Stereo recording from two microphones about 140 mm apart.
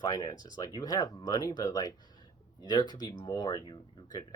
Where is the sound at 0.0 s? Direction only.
30° left (ahead or behind).